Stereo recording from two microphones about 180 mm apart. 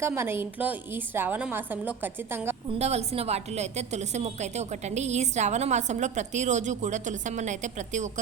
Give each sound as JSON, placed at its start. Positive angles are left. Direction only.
{"t": 0.0, "sound": "a woman's voice", "side_deg": -15}
{"t": 2.7, "sound": "a woman's voice", "side_deg": -35}